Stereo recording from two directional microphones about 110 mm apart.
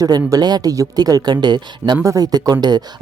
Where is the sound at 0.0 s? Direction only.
35° right (ahead or behind).